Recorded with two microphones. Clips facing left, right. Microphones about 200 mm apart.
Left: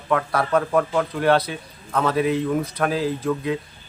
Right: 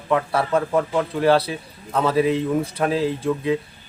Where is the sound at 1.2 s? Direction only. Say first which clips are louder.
Right 2 dB; 30° right (ahead or behind).